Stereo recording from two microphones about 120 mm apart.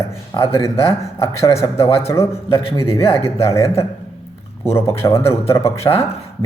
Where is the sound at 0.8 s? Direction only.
55° left (ahead or behind).